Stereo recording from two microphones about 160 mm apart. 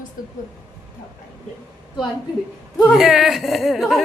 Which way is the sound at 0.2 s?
65° left (ahead or behind).